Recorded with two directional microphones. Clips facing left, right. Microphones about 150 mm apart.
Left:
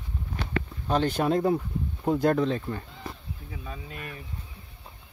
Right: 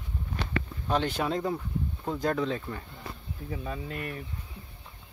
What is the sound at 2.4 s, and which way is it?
Speech, 30° left (ahead or behind).